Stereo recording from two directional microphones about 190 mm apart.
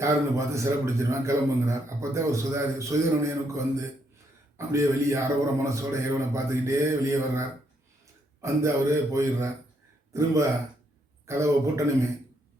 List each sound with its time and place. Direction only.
0.0 s a man's voice: 15° right (ahead or behind)